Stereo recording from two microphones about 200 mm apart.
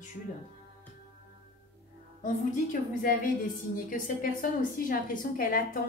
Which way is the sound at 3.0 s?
45° left (ahead or behind).